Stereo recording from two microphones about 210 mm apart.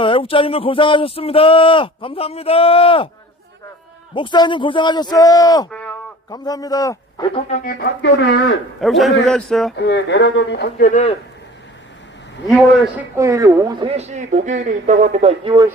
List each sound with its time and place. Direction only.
0.0 s speech: 25° left (ahead or behind)
4.1 s a man's voice: 20° left (ahead or behind)
7.5 s speech: 40° left (ahead or behind)
8.0 s speech: 60° left (ahead or behind)
8.8 s a man's voice: centre (ahead or behind)
9.7 s speech: 55° left (ahead or behind); by 11.1 s 35° left (ahead or behind)
12.5 s a man's voice: centre (ahead or behind)
13.1 s a woman's voice: 15° right (ahead or behind)